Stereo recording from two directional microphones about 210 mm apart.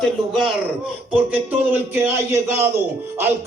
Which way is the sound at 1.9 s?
10° right (ahead or behind).